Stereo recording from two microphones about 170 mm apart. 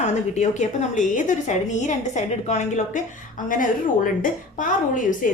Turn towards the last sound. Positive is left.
turn(degrees=50)  # may be behind; listen again after turning